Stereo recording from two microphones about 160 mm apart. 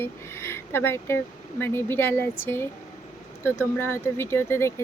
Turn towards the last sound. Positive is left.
turn(degrees=15)  # may be behind; listen again after turning